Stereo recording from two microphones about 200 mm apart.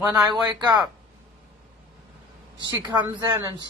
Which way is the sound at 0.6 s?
20° right (ahead or behind).